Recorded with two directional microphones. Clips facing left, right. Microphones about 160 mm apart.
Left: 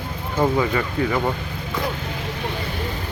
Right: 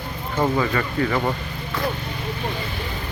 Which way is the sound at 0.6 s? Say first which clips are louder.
Left 1 dB; 15° left (ahead or behind).